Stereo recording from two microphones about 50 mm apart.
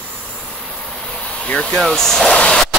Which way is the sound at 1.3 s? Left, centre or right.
Left.